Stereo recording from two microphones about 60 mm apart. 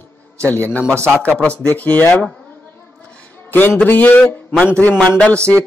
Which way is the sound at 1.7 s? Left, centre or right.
Left.